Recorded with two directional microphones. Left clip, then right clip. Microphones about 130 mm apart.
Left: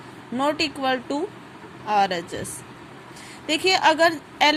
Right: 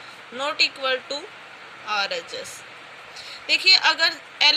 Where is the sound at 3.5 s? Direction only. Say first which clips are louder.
Right 2 dB; 60° left (ahead or behind).